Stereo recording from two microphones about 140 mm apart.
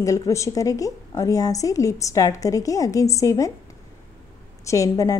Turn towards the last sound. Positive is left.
turn(degrees=25)  # may be behind; listen again after turning